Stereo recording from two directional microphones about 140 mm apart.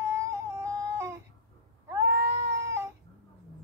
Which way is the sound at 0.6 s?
20° right (ahead or behind).